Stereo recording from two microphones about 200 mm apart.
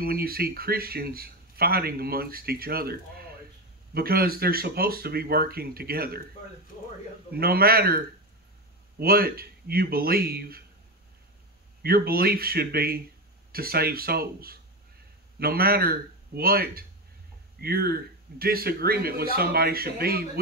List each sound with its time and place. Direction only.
0.0 s speech: 50° right (ahead or behind)
7.3 s speech: 50° right (ahead or behind)
9.0 s speech: 50° right (ahead or behind)
11.8 s speech: 50° right (ahead or behind)